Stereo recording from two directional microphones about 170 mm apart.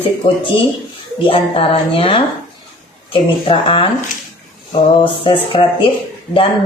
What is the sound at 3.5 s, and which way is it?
Speech, 30° left (ahead or behind).